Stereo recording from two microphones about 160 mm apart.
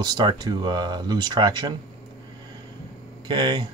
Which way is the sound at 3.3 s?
30° right (ahead or behind).